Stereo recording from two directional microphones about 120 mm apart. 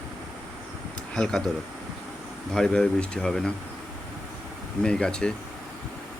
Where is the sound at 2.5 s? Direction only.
5° left (ahead or behind).